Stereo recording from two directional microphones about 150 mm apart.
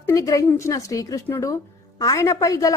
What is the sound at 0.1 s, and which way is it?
A woman's voice, 20° left (ahead or behind).